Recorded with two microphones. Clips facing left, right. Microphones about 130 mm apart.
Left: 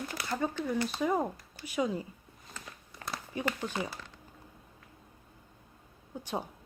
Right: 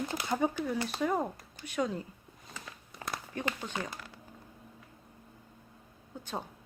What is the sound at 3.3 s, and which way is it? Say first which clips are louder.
Speech: left 3 dB; 10° left (ahead or behind).